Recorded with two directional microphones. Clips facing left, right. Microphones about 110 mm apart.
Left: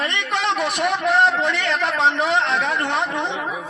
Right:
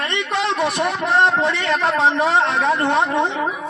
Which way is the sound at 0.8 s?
30° right (ahead or behind).